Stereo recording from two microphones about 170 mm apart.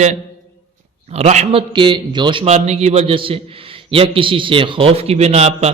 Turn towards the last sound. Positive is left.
turn(degrees=-40)  # may be behind; listen again after turning